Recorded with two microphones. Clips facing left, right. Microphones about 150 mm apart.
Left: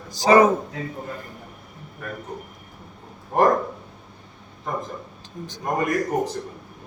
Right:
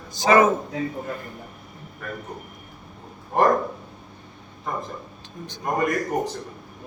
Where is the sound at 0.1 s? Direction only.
35° left (ahead or behind).